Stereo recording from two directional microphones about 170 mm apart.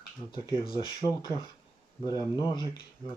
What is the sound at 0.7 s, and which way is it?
Speech, 25° left (ahead or behind).